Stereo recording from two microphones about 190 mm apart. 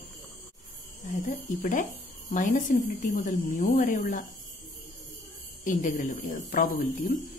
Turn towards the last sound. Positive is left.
turn(degrees=50)  # may be behind; listen again after turning